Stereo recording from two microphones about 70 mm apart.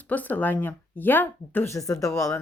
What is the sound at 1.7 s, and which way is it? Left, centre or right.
Speech, left.